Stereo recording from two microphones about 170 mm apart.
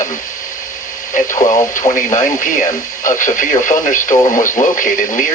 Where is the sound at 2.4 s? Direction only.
50° left (ahead or behind).